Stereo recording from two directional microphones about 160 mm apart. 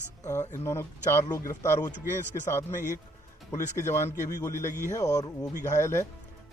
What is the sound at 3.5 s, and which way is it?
Speech, 15° left (ahead or behind).